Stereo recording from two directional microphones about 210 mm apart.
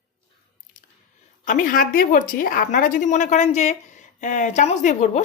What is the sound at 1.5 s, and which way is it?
Speech, 40° left (ahead or behind).